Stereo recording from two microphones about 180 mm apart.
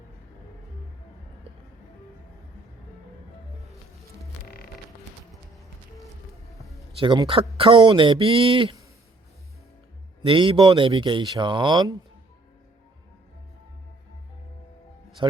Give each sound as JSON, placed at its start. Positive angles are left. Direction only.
{"t": 4.4, "sound": "music", "side_deg": 55}
{"t": 7.0, "sound": "speech", "side_deg": -25}
{"t": 10.2, "sound": "speech", "side_deg": -30}
{"t": 15.2, "sound": "speech", "side_deg": -25}